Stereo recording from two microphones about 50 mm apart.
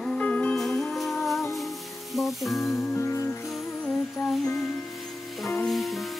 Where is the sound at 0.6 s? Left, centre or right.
Centre.